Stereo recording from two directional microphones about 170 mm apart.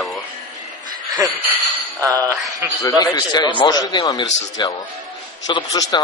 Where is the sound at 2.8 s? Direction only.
20° left (ahead or behind).